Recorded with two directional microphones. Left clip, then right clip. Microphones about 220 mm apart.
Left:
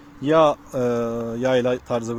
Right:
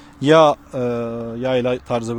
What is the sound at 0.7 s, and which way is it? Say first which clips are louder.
Speech: even; centre (ahead or behind).